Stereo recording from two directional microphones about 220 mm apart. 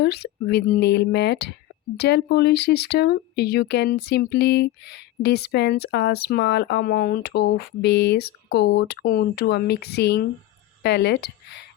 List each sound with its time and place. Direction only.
0.0 s speech: 45° left (ahead or behind)